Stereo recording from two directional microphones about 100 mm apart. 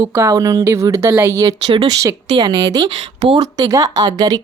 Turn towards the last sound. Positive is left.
turn(degrees=-40)  # may be behind; listen again after turning